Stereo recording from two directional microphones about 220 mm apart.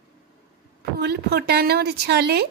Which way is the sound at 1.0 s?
50° right (ahead or behind).